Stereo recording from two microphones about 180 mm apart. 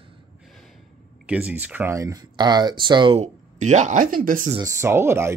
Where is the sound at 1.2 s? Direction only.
5° right (ahead or behind); by 3.3 s 30° right (ahead or behind).